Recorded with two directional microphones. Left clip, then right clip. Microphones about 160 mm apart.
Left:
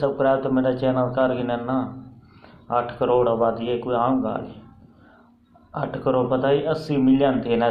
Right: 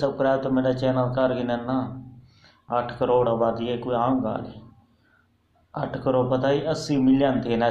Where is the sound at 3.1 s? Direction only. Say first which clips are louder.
Left 2 dB; 15° right (ahead or behind).